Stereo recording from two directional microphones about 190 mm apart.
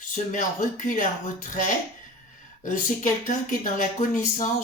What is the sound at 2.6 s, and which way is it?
Speech, 40° left (ahead or behind).